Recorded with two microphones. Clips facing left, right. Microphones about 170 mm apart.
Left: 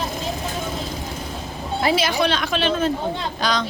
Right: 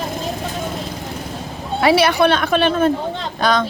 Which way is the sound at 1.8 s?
75° right (ahead or behind).